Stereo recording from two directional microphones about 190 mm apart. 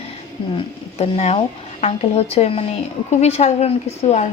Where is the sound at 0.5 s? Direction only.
35° left (ahead or behind).